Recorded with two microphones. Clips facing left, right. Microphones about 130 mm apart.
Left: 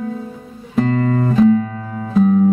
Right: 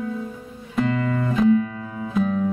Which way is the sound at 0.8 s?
40° left (ahead or behind).